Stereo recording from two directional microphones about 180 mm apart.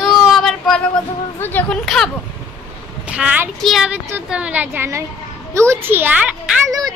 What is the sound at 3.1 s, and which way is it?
A child's voice, 5° right (ahead or behind).